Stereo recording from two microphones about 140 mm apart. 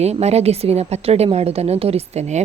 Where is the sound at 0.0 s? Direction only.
50° right (ahead or behind).